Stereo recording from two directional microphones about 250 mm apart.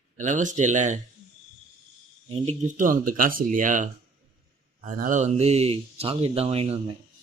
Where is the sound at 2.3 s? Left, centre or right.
Right.